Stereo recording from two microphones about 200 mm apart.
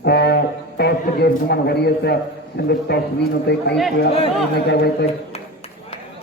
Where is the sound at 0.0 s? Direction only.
55° left (ahead or behind).